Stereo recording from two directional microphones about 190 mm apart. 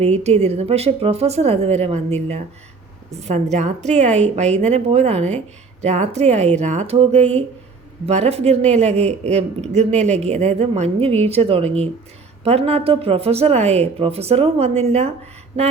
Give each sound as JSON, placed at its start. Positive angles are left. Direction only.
{"t": 0.0, "sound": "speech", "side_deg": -35}